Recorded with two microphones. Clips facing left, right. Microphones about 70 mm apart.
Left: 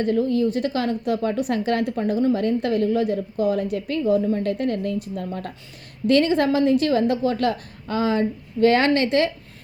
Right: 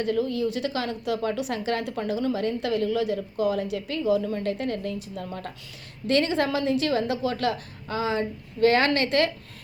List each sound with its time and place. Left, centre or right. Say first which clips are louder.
0.0 s speech: left 5 dB; left
8.6 s a woman's voice: left 3 dB; left